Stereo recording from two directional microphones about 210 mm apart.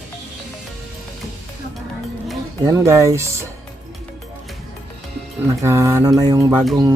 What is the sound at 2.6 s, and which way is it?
Mantra, 15° right (ahead or behind).